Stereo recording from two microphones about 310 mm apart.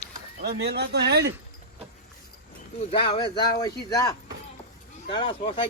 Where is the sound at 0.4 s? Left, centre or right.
Right.